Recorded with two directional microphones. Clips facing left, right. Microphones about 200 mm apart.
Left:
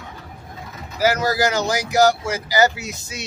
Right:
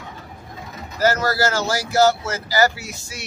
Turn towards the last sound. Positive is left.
turn(degrees=20)  # may be behind; listen again after turning